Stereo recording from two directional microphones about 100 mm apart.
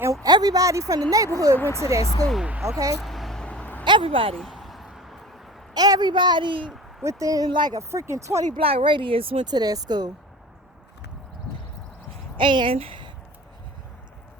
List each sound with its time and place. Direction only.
0.0 s a sound: 30° right (ahead or behind)
0.3 s a woman's voice: 40° right (ahead or behind)
2.5 s speech: 5° right (ahead or behind)
3.0 s vehicle: centre (ahead or behind)
3.8 s speech: 60° right (ahead or behind)
4.4 s a sound: centre (ahead or behind)
5.7 s a woman's voice: 40° right (ahead or behind)
7.0 s a woman's voice: 30° right (ahead or behind)
7.4 s a woman's voice: 50° right (ahead or behind)
7.8 s speech: 30° right (ahead or behind)
8.4 s speech: 70° right (ahead or behind)
9.5 s a woman's voice: 40° right (ahead or behind)
12.4 s a woman's voice: 55° right (ahead or behind)
12.7 s speech: 65° right (ahead or behind)